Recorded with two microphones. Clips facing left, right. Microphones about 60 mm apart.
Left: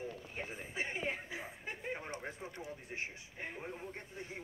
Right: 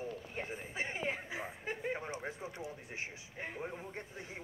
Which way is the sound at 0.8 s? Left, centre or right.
Centre.